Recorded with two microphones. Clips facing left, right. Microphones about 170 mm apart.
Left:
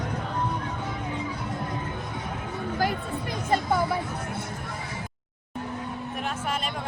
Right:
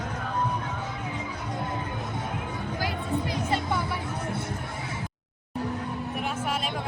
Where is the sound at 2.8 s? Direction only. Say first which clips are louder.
Left 1 dB; 50° left (ahead or behind).